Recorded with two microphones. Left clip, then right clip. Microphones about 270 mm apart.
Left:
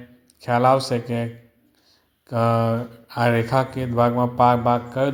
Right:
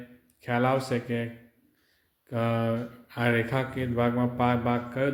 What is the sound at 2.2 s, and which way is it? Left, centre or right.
Speech, left.